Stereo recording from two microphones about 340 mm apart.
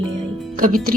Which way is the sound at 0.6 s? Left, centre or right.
Right.